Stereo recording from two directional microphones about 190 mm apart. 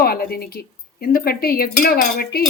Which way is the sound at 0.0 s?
55° left (ahead or behind).